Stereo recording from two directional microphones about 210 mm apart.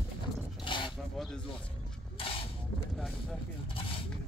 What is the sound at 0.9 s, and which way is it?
Speech, centre (ahead or behind).